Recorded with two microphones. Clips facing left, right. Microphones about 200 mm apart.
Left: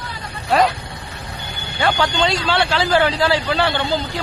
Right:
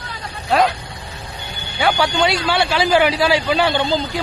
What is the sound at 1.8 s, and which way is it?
Speech, 10° right (ahead or behind).